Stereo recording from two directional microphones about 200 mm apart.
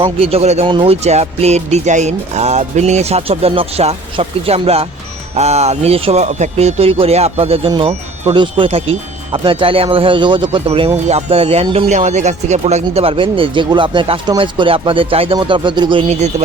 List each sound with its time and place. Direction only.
0.0 s speech: 30° right (ahead or behind)